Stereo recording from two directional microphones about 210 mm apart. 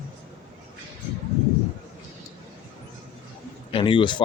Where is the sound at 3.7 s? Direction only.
25° left (ahead or behind).